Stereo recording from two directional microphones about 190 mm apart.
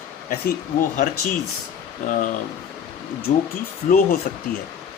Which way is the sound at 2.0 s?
40° left (ahead or behind).